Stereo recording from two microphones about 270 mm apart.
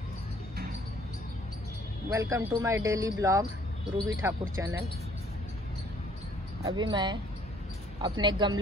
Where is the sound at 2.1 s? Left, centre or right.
Centre.